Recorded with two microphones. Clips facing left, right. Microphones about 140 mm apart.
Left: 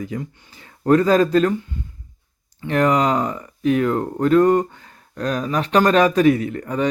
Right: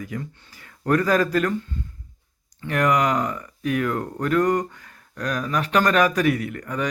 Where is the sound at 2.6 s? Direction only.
30° left (ahead or behind).